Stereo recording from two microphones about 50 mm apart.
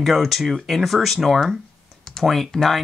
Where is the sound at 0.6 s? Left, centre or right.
Centre.